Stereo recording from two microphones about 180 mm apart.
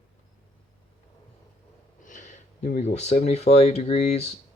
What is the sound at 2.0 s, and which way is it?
Speech, 45° left (ahead or behind).